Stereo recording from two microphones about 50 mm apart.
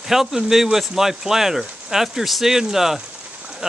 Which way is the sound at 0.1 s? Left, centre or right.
Centre.